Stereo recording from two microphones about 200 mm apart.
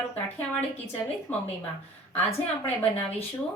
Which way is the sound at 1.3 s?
10° left (ahead or behind).